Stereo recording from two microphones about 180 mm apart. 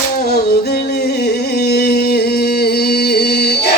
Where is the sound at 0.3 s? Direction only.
60° left (ahead or behind).